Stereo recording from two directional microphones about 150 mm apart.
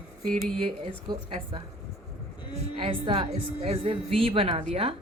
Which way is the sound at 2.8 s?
35° right (ahead or behind).